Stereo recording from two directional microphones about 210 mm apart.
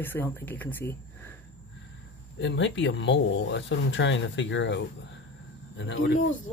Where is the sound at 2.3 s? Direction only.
55° left (ahead or behind).